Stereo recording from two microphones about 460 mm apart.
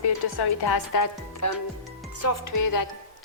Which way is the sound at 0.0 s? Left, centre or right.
Left.